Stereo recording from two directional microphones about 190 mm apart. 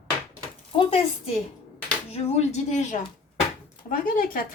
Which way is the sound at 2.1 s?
35° left (ahead or behind).